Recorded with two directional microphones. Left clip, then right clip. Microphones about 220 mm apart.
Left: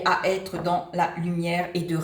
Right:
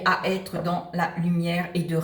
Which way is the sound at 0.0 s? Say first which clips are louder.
Left 1 dB; 40° left (ahead or behind).